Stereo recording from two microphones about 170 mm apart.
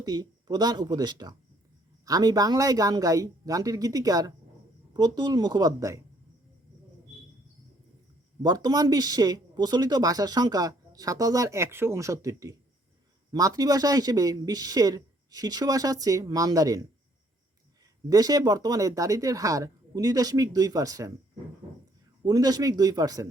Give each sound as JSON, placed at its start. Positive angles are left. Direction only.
{"t": 0.0, "sound": "speech", "side_deg": -25}
{"t": 8.4, "sound": "speech", "side_deg": -20}
{"t": 18.1, "sound": "speech", "side_deg": -20}
{"t": 22.2, "sound": "speech", "side_deg": -20}